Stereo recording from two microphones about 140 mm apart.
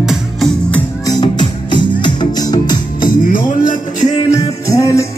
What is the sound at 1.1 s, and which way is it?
Music, 30° left (ahead or behind).